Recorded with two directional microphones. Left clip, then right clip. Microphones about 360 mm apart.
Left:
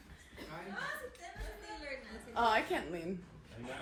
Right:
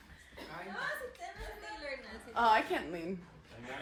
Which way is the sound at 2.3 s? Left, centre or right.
Right.